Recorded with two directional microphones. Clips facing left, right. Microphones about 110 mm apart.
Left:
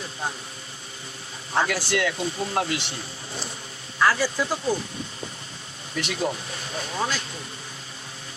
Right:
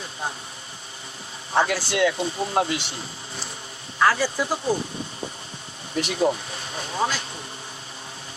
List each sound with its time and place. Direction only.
1.5 s speech: 25° right (ahead or behind)
4.0 s speech: 25° right (ahead or behind)
6.1 s speech: 25° right (ahead or behind)